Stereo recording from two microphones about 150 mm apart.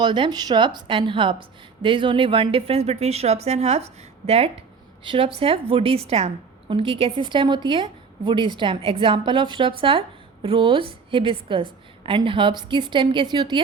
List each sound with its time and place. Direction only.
0.0 s a woman's voice: 30° right (ahead or behind)